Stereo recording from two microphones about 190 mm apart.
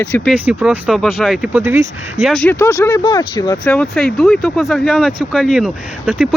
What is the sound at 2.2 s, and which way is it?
Speech, 5° left (ahead or behind).